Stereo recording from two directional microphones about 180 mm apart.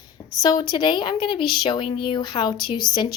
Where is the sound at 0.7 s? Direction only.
25° left (ahead or behind).